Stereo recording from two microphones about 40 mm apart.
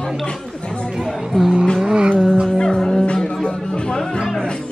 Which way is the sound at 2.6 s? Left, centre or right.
Left.